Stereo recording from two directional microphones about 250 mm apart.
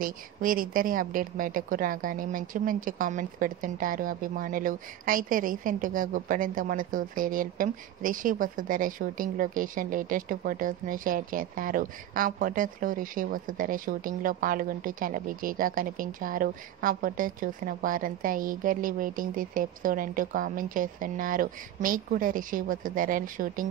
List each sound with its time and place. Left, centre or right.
0.0 s a woman's voice: right